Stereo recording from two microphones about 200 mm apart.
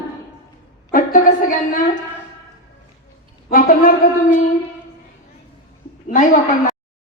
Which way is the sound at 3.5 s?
45° left (ahead or behind).